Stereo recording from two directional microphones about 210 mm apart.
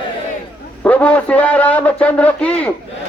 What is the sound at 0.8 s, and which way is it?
A man's voice, 5° left (ahead or behind).